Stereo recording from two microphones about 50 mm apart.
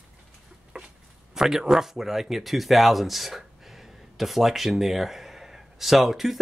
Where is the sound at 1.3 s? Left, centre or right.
Centre.